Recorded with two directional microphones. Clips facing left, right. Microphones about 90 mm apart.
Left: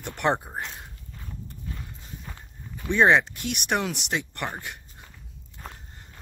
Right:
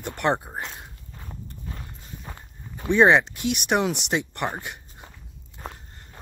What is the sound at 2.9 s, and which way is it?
Speech, 10° right (ahead or behind).